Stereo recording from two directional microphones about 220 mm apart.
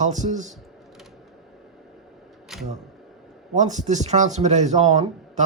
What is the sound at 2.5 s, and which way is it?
Speech, centre (ahead or behind).